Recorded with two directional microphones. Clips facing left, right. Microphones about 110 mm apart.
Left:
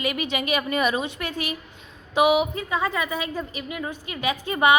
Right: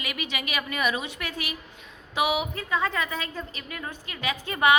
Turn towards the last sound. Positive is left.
turn(degrees=20)  # may be behind; listen again after turning